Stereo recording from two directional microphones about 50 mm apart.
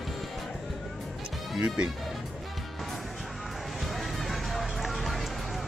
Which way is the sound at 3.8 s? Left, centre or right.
Centre.